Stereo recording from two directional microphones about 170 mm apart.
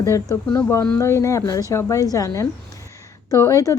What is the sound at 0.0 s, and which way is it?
A woman's voice, 20° left (ahead or behind).